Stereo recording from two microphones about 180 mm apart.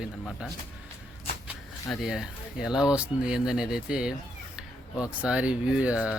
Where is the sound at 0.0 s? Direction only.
Centre (ahead or behind).